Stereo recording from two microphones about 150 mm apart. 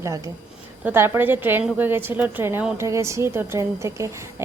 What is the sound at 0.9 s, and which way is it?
A woman's voice, 15° right (ahead or behind).